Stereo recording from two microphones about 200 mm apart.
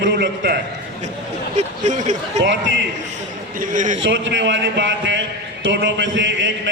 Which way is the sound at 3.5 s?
40° right (ahead or behind).